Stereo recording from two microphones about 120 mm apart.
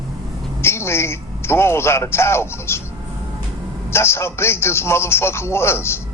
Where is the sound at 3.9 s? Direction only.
20° left (ahead or behind).